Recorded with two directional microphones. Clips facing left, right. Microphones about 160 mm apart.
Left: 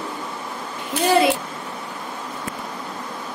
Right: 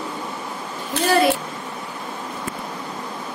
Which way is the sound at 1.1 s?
20° left (ahead or behind).